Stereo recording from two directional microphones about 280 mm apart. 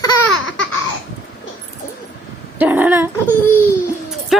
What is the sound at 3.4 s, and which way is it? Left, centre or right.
Speech, centre.